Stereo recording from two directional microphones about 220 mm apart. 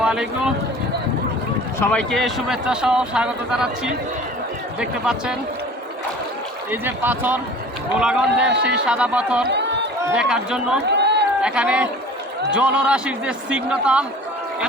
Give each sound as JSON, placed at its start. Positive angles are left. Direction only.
{"t": 0.0, "sound": "run", "side_deg": -5}
{"t": 1.8, "sound": "speech", "side_deg": 5}
{"t": 6.7, "sound": "a man's voice", "side_deg": -10}
{"t": 9.5, "sound": "run", "side_deg": -50}
{"t": 10.0, "sound": "speech", "side_deg": -5}
{"t": 10.8, "sound": "run", "side_deg": -50}
{"t": 11.4, "sound": "speech", "side_deg": -5}